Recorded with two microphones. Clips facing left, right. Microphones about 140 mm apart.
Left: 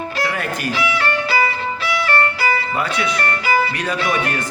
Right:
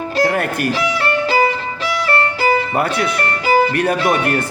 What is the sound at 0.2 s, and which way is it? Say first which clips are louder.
Music: right 8 dB; 55° right (ahead or behind).